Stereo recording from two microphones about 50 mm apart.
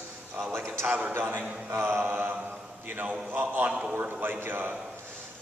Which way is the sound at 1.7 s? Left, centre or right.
Right.